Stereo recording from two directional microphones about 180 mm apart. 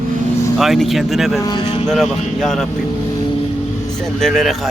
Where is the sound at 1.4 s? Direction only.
25° left (ahead or behind).